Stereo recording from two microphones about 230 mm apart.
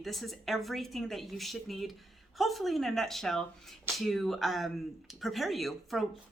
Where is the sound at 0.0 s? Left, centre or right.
Centre.